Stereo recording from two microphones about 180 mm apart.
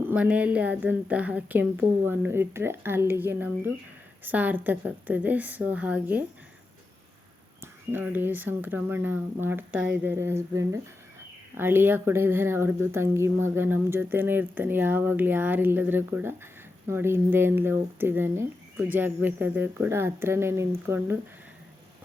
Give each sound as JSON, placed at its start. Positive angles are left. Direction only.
{"t": 0.1, "sound": "speech", "side_deg": -10}
{"t": 7.6, "sound": "speech", "side_deg": -10}